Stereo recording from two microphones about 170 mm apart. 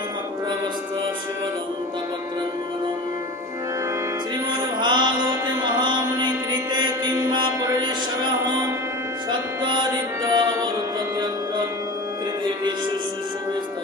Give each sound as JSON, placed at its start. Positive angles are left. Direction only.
{"t": 4.8, "sound": "music", "side_deg": -25}
{"t": 5.8, "sound": "mantra", "side_deg": -25}
{"t": 9.3, "sound": "music", "side_deg": -25}